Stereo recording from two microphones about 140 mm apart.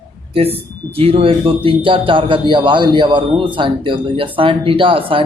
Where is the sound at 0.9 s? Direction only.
40° right (ahead or behind).